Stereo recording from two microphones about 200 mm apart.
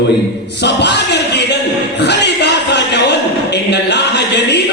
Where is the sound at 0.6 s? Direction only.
60° left (ahead or behind).